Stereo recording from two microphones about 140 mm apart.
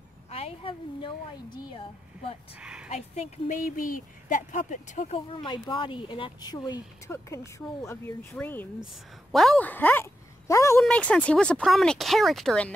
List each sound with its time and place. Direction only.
0.3 s a woman's voice: 45° left (ahead or behind)
2.6 s a woman's voice: 5° right (ahead or behind)
2.9 s speech: 50° left (ahead or behind)
5.3 s speech: 35° left (ahead or behind)
10.8 s speech: 5° left (ahead or behind)